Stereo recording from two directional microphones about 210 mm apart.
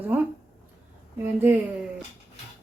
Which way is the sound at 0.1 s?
10° right (ahead or behind).